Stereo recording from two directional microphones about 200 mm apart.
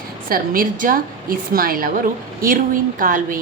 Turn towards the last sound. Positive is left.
turn(degrees=-45)  # may be behind; listen again after turning